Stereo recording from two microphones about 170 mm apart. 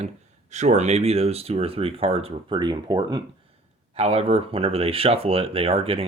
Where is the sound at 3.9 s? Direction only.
35° right (ahead or behind).